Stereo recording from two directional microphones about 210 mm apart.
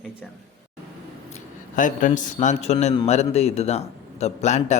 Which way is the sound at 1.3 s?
35° left (ahead or behind).